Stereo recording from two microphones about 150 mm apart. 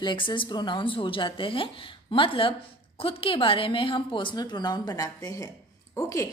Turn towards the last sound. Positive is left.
turn(degrees=20)  # may be behind; listen again after turning